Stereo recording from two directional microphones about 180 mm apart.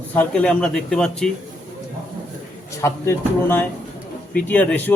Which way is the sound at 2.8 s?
15° left (ahead or behind).